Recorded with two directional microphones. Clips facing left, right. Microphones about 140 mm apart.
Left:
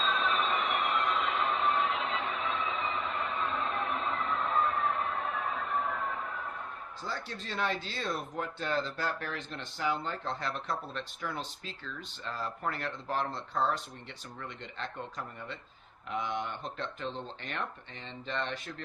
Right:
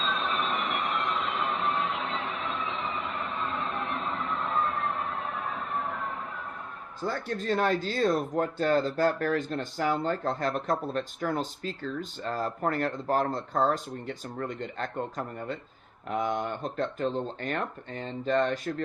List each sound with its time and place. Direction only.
0.3 s vehicle: centre (ahead or behind)
1.3 s music: centre (ahead or behind)
7.0 s speech: 50° right (ahead or behind)